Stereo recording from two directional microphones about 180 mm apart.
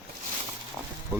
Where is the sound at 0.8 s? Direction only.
5° right (ahead or behind).